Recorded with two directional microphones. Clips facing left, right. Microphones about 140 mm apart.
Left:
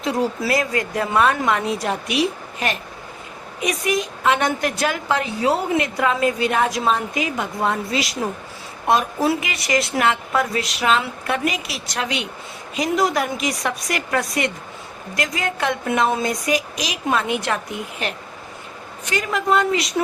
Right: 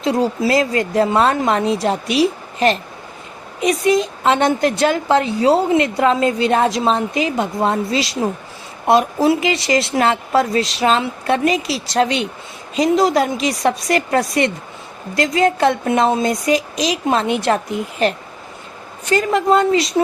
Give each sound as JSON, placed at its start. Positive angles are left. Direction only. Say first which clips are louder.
{"t": 0.0, "sound": "a woman's voice", "louder": "right 5 dB", "side_deg": -25}
{"t": 19.1, "sound": "speech", "louder": "right 5 dB", "side_deg": -30}